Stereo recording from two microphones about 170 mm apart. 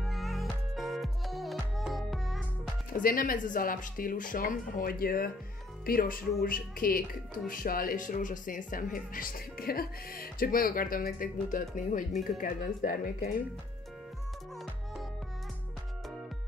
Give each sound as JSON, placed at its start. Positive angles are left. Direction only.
{"t": 0.0, "sound": "music", "side_deg": 0}
{"t": 2.9, "sound": "speech", "side_deg": 55}